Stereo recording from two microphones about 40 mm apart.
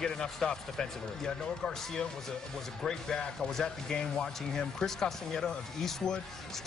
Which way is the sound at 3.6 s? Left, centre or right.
Left.